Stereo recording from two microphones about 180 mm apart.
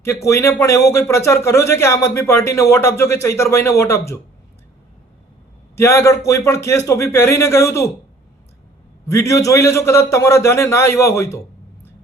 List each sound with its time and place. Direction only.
0.0 s speech: 15° left (ahead or behind)
5.7 s speech: 15° left (ahead or behind)
9.0 s speech: 15° left (ahead or behind)